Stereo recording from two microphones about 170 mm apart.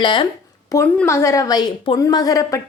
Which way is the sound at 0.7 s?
15° left (ahead or behind).